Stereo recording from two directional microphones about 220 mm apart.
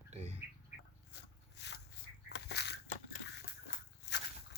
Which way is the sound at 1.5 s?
50° left (ahead or behind).